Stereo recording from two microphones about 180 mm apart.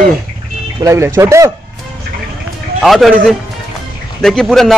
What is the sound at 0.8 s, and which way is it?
Speech, 15° right (ahead or behind).